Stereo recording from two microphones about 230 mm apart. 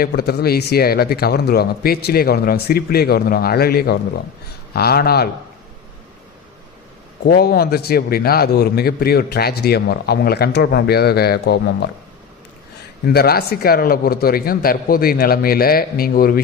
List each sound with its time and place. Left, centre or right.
0.0 s a man's voice: left
7.3 s a man's voice: left
13.1 s a man's voice: left